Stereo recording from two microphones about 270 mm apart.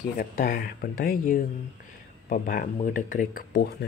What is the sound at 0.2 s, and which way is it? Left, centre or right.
Speech, left.